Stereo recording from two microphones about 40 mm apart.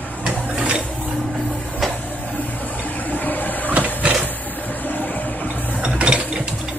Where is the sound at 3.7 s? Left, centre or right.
Right.